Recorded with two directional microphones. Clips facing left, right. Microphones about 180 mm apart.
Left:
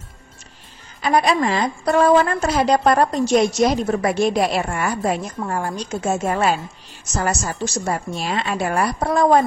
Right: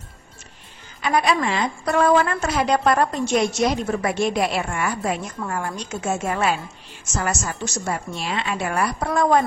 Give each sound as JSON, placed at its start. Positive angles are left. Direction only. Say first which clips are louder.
{"t": 1.0, "sound": "a woman's voice", "louder": "left 3 dB", "side_deg": 35}